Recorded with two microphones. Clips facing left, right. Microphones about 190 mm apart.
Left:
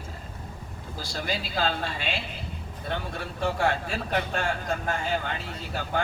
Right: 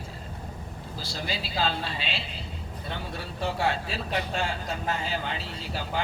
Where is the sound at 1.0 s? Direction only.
50° left (ahead or behind).